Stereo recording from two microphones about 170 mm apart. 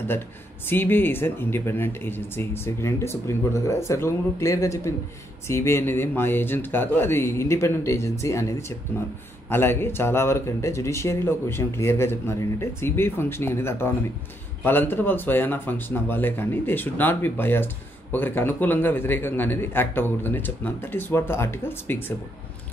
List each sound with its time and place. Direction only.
0.7 s speech: 10° left (ahead or behind)